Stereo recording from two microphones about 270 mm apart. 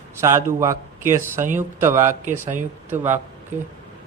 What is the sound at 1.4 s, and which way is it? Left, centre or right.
Speech, right.